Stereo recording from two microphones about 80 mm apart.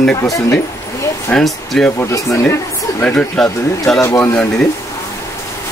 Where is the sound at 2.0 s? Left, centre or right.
Left.